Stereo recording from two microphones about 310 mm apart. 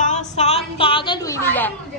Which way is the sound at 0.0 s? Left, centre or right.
Left.